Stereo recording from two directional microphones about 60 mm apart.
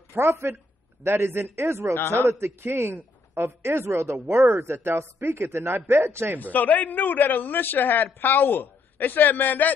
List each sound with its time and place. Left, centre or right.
0.1 s a man's voice: right
2.0 s a man's voice: left
2.2 s a man's voice: right
6.4 s a man's voice: left